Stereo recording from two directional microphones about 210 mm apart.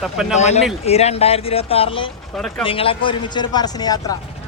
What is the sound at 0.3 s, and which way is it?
Speech, 30° left (ahead or behind).